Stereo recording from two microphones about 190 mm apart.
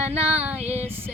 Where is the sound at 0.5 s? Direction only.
35° right (ahead or behind).